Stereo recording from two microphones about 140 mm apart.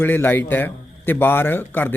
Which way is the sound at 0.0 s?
15° left (ahead or behind).